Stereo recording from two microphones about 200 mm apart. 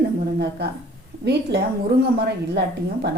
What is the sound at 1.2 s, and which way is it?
A woman's voice, 55° right (ahead or behind).